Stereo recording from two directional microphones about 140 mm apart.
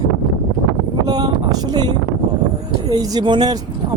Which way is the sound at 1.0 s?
30° right (ahead or behind).